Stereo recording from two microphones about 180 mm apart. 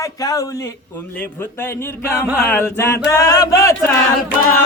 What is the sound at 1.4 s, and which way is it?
Speech, 15° left (ahead or behind).